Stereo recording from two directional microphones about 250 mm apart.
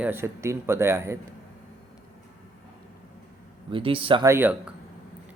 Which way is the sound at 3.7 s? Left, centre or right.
Right.